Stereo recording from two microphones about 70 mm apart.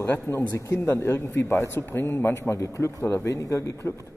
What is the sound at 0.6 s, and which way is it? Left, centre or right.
A man's voice, left.